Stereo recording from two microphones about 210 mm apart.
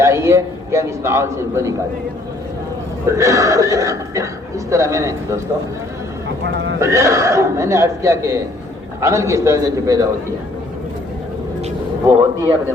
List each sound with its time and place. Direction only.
0.0 s speech: 15° right (ahead or behind)
3.2 s speech: 15° right (ahead or behind)
6.4 s speech: 60° right (ahead or behind)
6.7 s speech: 15° right (ahead or behind)
12.0 s speech: 15° right (ahead or behind)